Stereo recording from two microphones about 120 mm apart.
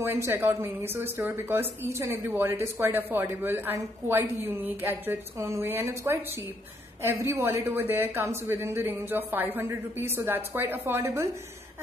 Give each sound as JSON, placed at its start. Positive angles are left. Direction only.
{"t": 0.0, "sound": "a woman's voice", "side_deg": -25}
{"t": 7.2, "sound": "a woman's voice", "side_deg": -20}